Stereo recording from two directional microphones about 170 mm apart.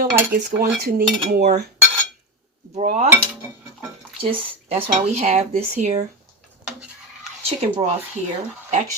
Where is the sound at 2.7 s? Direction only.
40° right (ahead or behind).